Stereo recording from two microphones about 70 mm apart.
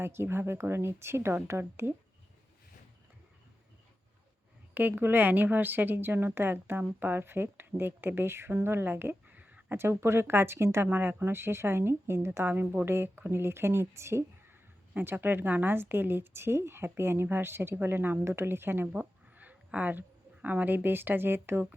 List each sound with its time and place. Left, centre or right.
0.0 s a woman's voice: right
4.7 s a woman's voice: right
8.6 s a sound: right
9.7 s a woman's voice: right
10.8 s a woman's voice: right
14.9 s a woman's voice: right